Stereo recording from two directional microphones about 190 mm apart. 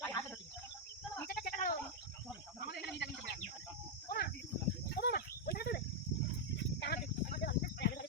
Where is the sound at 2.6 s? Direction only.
60° left (ahead or behind).